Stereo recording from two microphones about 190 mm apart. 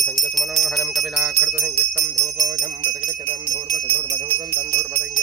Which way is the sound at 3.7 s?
40° right (ahead or behind).